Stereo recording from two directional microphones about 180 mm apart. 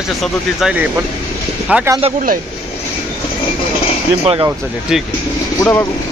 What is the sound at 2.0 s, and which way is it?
Speech, 35° right (ahead or behind).